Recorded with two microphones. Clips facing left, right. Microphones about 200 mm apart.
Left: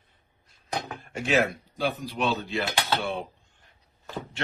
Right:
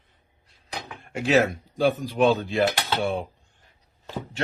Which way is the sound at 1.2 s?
40° right (ahead or behind).